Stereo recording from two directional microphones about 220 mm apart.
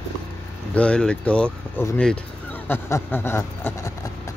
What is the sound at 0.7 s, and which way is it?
Speech, 5° left (ahead or behind).